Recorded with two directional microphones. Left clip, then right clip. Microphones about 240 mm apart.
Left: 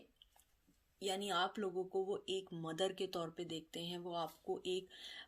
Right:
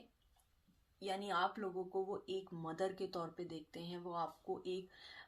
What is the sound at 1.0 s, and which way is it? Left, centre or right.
Speech, left.